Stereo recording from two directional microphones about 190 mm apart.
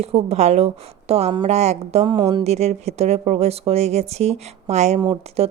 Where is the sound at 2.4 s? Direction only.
35° right (ahead or behind).